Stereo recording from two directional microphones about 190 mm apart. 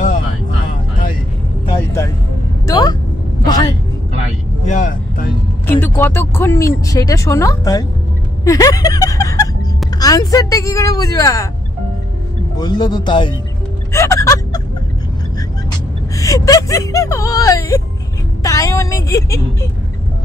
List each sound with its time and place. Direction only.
2.6 s vehicle: 20° left (ahead or behind)
3.4 s a sound: 20° left (ahead or behind)
4.6 s vehicle: 40° left (ahead or behind)
5.7 s speech: 10° left (ahead or behind)
12.5 s speech: 20° left (ahead or behind)
16.2 s speech: 20° left (ahead or behind)